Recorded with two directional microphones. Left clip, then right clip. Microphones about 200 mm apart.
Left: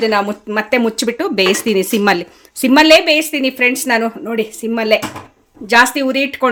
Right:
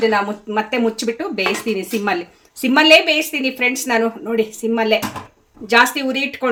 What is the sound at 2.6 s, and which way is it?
Speech, 45° left (ahead or behind).